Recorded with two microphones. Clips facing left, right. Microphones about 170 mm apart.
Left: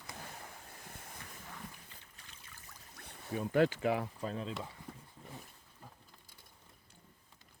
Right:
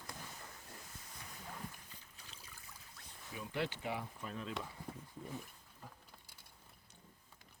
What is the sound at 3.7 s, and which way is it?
Speech, 90° left.